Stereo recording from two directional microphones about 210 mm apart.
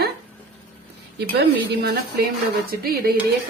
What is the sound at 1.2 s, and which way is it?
A woman's voice, 50° right (ahead or behind).